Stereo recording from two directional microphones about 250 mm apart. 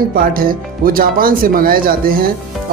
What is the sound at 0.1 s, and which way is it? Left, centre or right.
Speech, right.